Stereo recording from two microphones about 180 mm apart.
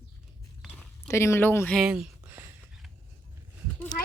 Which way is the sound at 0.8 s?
15° left (ahead or behind).